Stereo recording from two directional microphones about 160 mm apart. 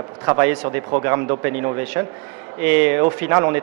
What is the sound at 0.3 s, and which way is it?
A man's voice, 15° right (ahead or behind).